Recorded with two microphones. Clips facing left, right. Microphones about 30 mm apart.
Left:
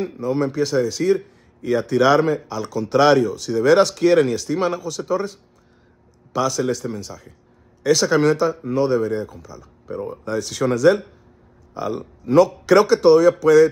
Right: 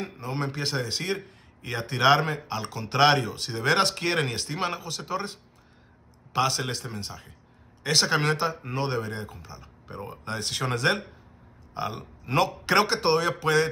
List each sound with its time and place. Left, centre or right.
0.0 s speech: right